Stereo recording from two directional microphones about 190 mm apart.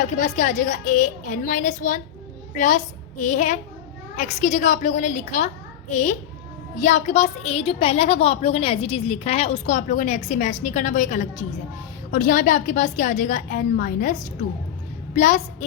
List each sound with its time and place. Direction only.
0.0 s a woman's voice: 40° left (ahead or behind)